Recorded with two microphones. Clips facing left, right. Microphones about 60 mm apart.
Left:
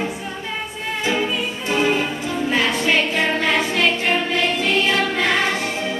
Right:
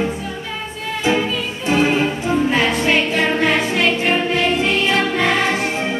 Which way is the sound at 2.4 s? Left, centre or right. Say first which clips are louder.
Left 1 dB; centre.